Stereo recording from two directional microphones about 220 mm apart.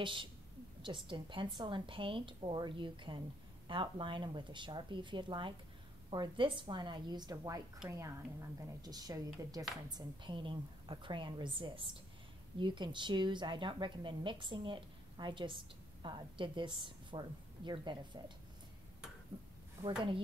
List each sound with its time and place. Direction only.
0.0 s a woman's voice: 20° right (ahead or behind)